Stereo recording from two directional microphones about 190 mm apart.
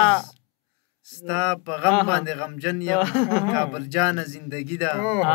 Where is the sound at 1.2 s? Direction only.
25° right (ahead or behind).